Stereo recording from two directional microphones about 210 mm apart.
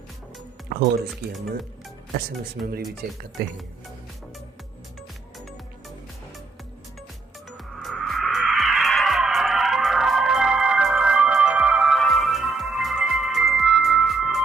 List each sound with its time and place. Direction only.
0.7 s speech: 50° right (ahead or behind)
3.0 s speech: 45° right (ahead or behind)
7.5 s music: centre (ahead or behind)